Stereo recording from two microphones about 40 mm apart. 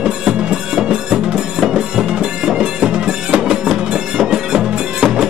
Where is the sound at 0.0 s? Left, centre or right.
Right.